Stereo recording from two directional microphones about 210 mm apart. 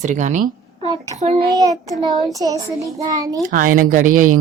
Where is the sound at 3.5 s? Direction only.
40° right (ahead or behind).